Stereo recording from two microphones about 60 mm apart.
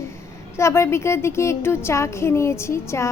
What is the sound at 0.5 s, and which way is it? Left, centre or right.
Speech, left.